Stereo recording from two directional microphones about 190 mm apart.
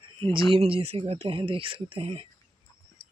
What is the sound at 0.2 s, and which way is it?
Speech, 30° right (ahead or behind).